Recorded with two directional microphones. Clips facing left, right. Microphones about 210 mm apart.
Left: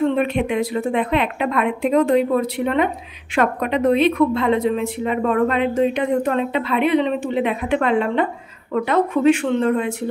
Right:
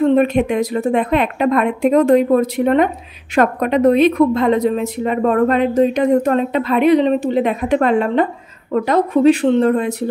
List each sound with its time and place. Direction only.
0.0 s a woman's voice: 40° right (ahead or behind)